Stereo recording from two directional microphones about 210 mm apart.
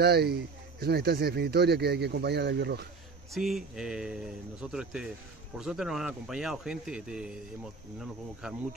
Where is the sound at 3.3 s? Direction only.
Centre (ahead or behind).